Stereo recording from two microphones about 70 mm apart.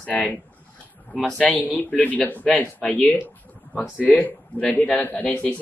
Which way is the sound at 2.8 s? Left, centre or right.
Centre.